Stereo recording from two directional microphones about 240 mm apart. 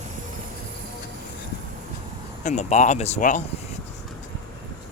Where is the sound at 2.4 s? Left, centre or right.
Left.